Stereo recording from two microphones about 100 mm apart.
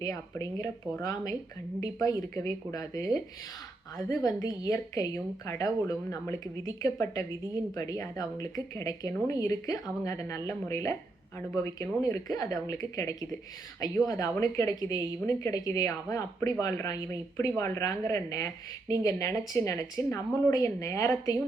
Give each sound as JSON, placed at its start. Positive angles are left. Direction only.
{"t": 0.0, "sound": "a woman's voice", "side_deg": 35}